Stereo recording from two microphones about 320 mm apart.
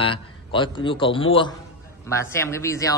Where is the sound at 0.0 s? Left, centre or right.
Centre.